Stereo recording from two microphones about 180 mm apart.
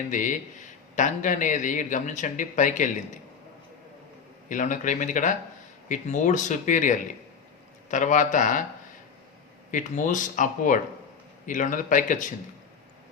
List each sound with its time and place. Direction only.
0.1 s speech: 45° left (ahead or behind)
4.4 s speech: 45° left (ahead or behind)
9.7 s speech: 45° left (ahead or behind)